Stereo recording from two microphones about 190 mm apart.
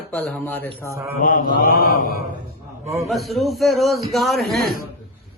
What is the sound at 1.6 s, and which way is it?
Mantra, 50° left (ahead or behind).